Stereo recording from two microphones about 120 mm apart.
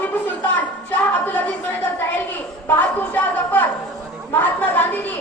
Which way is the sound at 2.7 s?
15° left (ahead or behind).